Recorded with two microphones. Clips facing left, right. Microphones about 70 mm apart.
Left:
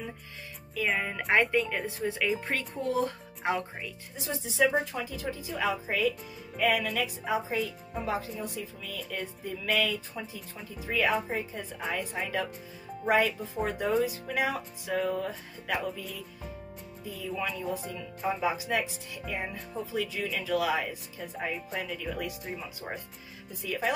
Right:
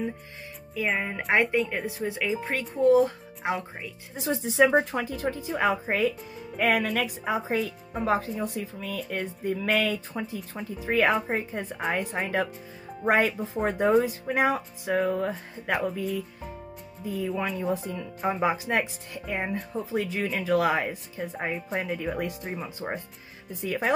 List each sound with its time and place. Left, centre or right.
0.7 s speech: centre
4.2 s speech: right